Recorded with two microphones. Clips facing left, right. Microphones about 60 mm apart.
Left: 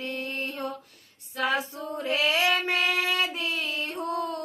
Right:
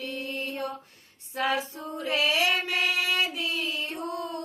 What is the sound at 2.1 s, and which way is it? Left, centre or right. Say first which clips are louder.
Mantra: left 1 dB; left.